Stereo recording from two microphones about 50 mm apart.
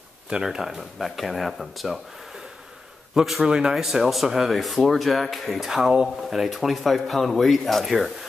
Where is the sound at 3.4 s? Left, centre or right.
Centre.